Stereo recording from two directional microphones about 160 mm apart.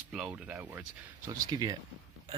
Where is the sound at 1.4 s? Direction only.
25° right (ahead or behind).